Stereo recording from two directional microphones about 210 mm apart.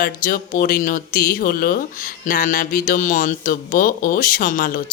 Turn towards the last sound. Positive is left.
turn(degrees=40)  # may be behind; listen again after turning